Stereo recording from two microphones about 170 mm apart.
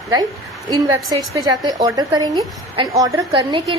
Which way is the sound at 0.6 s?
20° right (ahead or behind).